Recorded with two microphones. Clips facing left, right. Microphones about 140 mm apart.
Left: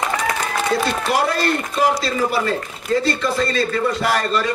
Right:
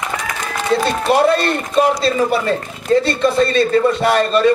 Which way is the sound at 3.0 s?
25° right (ahead or behind).